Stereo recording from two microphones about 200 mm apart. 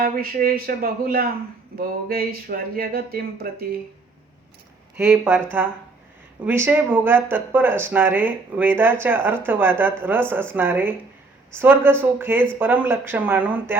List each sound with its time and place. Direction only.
0.0 s speech: 45° right (ahead or behind)
4.9 s speech: 10° right (ahead or behind)